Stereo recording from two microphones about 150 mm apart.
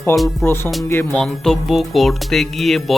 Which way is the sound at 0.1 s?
20° left (ahead or behind).